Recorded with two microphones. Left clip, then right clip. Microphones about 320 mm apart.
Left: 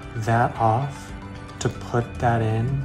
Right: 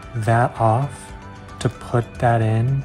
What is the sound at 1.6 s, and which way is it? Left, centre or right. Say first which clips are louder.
Speech: right 2 dB; right.